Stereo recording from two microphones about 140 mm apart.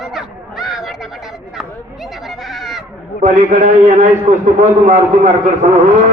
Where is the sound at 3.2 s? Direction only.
65° right (ahead or behind).